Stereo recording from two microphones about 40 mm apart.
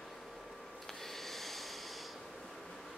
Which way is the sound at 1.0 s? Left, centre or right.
Centre.